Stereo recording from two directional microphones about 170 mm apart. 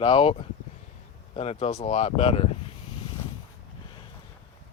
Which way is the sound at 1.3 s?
40° left (ahead or behind).